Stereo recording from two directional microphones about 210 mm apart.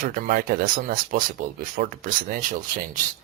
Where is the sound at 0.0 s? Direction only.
40° right (ahead or behind).